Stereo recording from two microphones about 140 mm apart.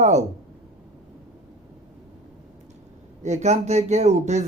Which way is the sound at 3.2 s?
55° right (ahead or behind).